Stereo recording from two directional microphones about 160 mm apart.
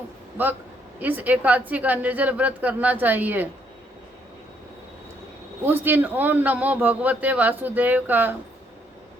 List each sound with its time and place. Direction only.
0.9 s a man's voice: 10° right (ahead or behind)
5.6 s a man's voice: 10° right (ahead or behind)